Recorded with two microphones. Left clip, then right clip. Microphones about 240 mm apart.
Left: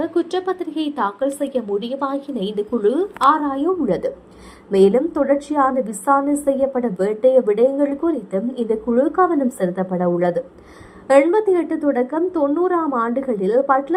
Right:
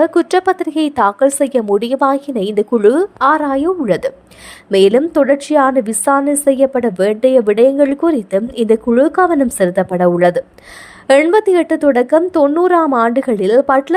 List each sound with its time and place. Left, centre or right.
0.0 s a woman's voice: right
0.7 s a woman's voice: right
0.9 s a woman's voice: right
2.1 s a woman's voice: right
2.7 s a woman's voice: right